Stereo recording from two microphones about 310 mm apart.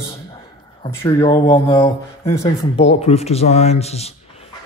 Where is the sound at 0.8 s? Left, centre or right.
Centre.